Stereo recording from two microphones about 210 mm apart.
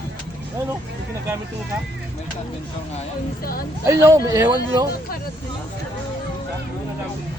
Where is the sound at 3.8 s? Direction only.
15° right (ahead or behind).